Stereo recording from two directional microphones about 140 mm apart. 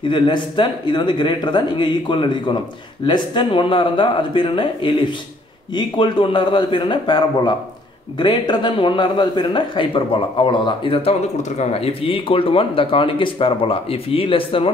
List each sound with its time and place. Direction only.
0.1 s a man's voice: 35° left (ahead or behind)